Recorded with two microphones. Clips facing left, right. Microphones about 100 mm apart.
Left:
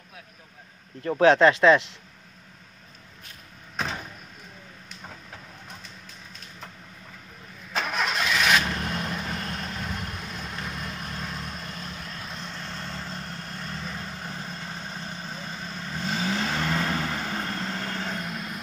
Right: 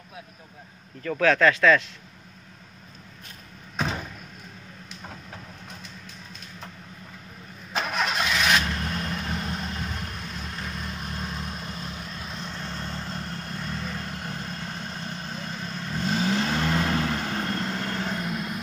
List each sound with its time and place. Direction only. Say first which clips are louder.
1.0 s speech: left 3 dB; 30° left (ahead or behind)
7.7 s vehicle: right 1 dB; 5° right (ahead or behind)
8.5 s vehicle: left 1 dB; 10° left (ahead or behind)
9.3 s vehicle: right 2 dB; 5° right (ahead or behind)